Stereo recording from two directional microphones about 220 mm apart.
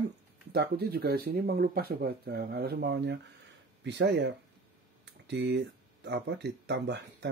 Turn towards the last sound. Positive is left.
turn(degrees=-50)  # may be behind; listen again after turning